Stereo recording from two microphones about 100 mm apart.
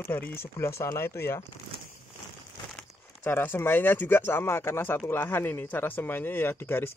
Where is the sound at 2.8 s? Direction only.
20° left (ahead or behind).